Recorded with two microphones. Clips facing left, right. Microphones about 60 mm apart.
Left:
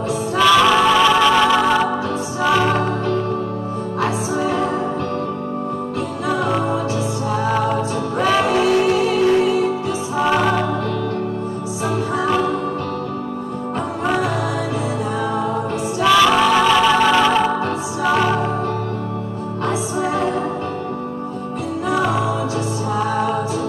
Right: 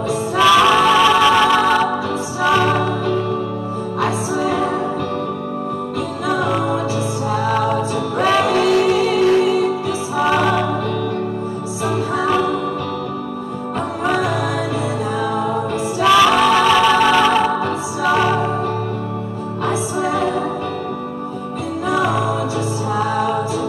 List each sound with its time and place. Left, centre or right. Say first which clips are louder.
0.4 s music: right 1 dB; centre
7.4 s music: right 1 dB; left
10.2 s music: right 1 dB; centre
16.0 s music: right 1 dB; centre
20.1 s music: right 1 dB; left